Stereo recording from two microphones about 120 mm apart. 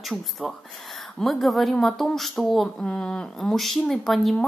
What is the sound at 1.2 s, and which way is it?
Speech, centre (ahead or behind).